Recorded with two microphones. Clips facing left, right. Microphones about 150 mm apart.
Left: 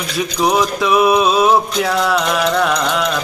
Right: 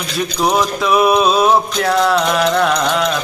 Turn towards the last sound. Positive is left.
turn(degrees=0)  # may be behind; listen again after turning